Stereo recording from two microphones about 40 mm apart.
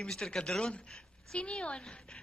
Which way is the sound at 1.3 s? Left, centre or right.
Left.